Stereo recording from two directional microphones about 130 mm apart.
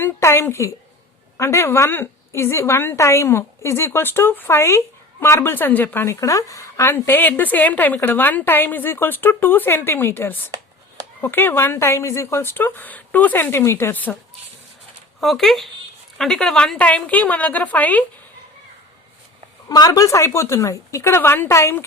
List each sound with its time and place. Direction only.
0.0 s a woman's voice: 20° left (ahead or behind)
15.2 s a woman's voice: centre (ahead or behind)
19.6 s a woman's voice: 30° left (ahead or behind)